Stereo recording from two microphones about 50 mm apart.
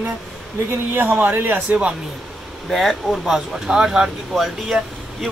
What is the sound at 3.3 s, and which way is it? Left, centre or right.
Speech, centre.